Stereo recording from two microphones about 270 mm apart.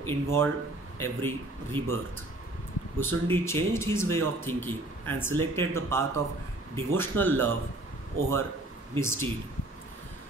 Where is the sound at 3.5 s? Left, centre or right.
Centre.